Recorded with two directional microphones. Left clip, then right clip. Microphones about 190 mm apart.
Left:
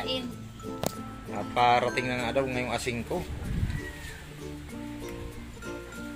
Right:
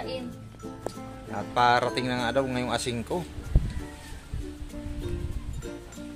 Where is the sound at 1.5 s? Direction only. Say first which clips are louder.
Right 1 dB; 20° right (ahead or behind).